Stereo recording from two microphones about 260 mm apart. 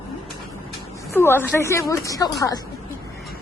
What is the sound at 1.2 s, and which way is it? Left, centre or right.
A woman's voice, centre.